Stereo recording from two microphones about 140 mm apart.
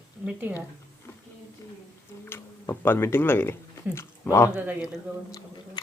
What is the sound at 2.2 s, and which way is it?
Speech, 15° left (ahead or behind).